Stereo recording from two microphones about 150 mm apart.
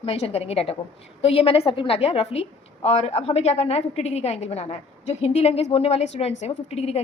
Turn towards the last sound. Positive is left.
turn(degrees=45)  # may be behind; listen again after turning